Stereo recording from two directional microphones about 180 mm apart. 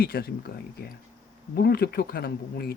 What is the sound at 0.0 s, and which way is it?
Speech, 60° left (ahead or behind).